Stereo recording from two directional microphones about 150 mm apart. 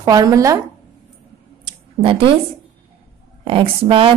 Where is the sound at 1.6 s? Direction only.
35° right (ahead or behind).